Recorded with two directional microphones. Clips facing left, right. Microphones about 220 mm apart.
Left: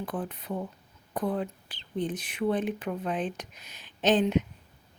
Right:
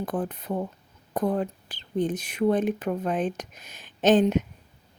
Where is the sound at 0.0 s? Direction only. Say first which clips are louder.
Right 5 dB; 45° right (ahead or behind).